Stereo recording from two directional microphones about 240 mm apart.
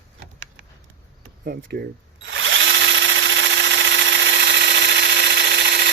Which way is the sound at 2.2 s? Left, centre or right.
Right.